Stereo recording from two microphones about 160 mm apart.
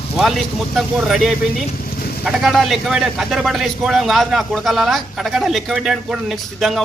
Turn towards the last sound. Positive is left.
turn(degrees=0)  # may be behind; listen again after turning